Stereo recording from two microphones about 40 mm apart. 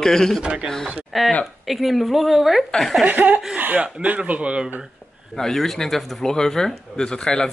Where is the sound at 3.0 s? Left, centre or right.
Right.